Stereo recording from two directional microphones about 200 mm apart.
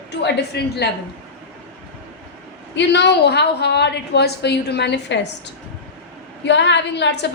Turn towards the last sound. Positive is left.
turn(degrees=60)  # may be behind; listen again after turning